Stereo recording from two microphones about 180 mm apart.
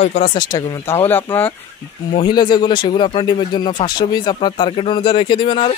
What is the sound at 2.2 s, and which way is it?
Speech, 25° left (ahead or behind).